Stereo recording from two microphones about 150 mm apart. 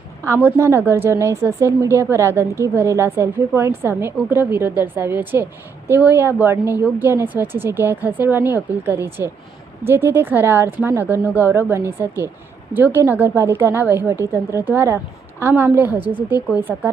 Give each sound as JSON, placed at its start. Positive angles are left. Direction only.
{"t": 0.3, "sound": "a woman's voice", "side_deg": -15}